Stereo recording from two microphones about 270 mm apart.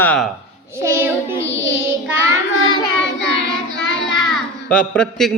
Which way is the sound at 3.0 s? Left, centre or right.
Left.